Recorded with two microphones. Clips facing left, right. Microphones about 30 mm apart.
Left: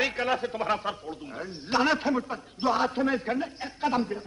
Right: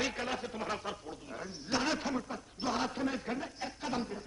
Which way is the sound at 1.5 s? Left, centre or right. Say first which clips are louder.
Left 7 dB; left.